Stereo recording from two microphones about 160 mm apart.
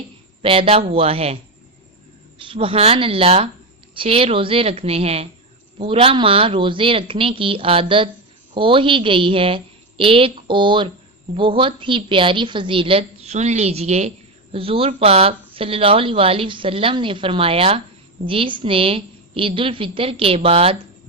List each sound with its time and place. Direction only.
0.4 s speech: 35° right (ahead or behind)
2.4 s speech: 35° right (ahead or behind)